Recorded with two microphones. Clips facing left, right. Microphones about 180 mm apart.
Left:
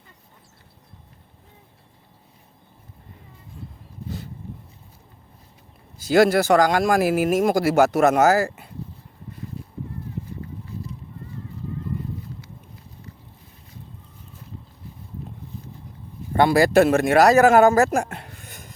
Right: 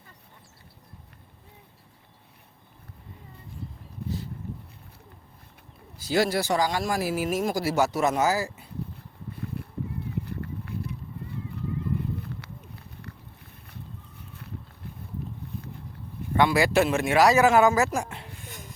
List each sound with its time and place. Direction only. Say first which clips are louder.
6.1 s speech: left 8 dB; 70° left (ahead or behind)
6.6 s speech: left 8 dB; 55° left (ahead or behind)
8.2 s speech: left 7 dB; 55° left (ahead or behind)
9.6 s a sound: right 1 dB; 65° right (ahead or behind)
12.2 s run: even; 65° right (ahead or behind)
16.3 s speech: left 5 dB; 40° left (ahead or behind)